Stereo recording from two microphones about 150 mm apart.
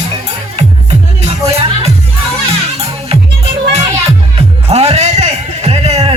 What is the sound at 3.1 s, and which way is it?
Music, 40° right (ahead or behind).